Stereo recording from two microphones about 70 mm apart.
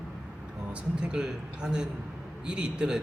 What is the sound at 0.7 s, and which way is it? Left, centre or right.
A man's voice, centre.